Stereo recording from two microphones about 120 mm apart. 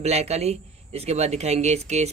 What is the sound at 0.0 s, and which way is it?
Speech, 65° right (ahead or behind).